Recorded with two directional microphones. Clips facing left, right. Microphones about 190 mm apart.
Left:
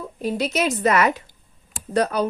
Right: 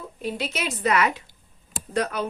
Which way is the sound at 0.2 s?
40° left (ahead or behind).